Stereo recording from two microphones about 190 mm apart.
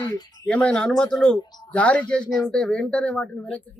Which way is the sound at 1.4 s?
20° left (ahead or behind).